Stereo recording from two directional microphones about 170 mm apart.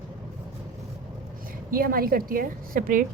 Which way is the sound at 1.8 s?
60° right (ahead or behind).